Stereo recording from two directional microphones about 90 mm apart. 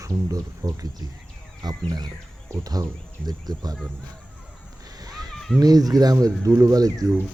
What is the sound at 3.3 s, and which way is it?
Speech, 45° right (ahead or behind).